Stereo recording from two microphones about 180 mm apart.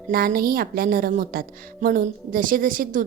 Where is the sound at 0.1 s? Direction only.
55° right (ahead or behind).